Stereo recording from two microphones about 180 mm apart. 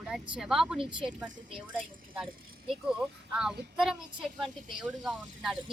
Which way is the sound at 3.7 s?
Centre (ahead or behind).